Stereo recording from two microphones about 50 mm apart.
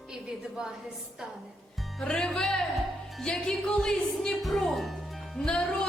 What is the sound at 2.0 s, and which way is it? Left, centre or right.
Music, centre.